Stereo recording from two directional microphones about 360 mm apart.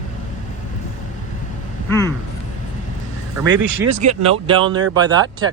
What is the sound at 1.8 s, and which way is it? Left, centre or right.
Speech, centre.